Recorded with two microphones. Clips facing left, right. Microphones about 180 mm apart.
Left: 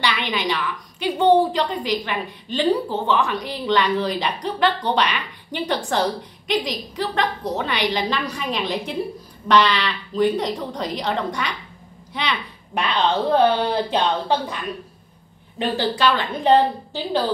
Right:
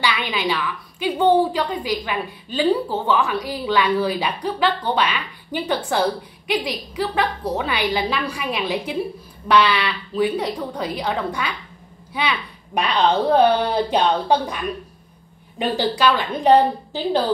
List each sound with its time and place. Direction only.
0.0 s a woman's voice: 5° right (ahead or behind)
15.8 s a woman's voice: 10° right (ahead or behind)